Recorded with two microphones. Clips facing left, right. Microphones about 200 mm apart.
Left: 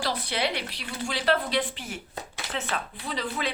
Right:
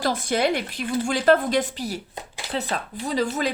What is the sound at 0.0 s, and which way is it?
Speech, 45° right (ahead or behind).